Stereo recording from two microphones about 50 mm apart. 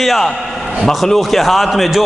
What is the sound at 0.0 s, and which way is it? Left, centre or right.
A man's voice, centre.